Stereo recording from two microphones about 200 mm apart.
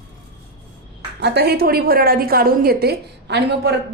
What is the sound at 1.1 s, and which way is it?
A woman's voice, 55° right (ahead or behind).